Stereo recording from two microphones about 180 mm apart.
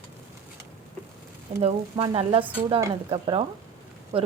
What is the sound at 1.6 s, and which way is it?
Speech, 30° right (ahead or behind).